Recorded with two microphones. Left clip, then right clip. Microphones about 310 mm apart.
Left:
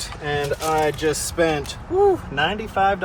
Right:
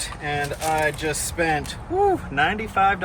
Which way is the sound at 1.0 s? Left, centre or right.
Centre.